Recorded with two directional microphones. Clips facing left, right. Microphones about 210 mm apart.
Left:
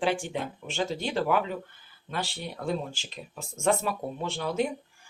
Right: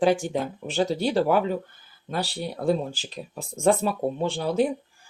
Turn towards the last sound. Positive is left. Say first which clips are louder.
# right 5 dB
turn(degrees=-35)  # may be behind; listen again after turning